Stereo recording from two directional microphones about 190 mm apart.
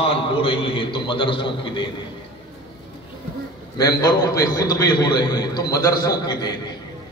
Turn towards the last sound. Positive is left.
turn(degrees=20)  # may be behind; listen again after turning